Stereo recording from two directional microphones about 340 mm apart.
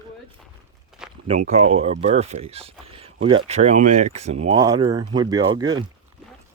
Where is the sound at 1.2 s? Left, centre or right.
Centre.